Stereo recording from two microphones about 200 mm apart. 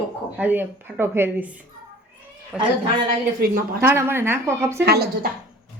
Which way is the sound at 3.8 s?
10° right (ahead or behind).